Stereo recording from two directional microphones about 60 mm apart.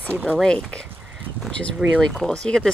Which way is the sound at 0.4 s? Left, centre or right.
Centre.